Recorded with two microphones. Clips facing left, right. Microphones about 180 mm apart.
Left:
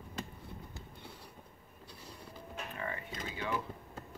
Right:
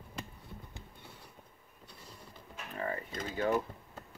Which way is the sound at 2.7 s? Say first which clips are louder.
Right 6 dB; 40° right (ahead or behind).